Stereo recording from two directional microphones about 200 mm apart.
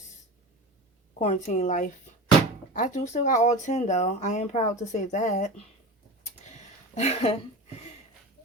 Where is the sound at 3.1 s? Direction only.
35° left (ahead or behind).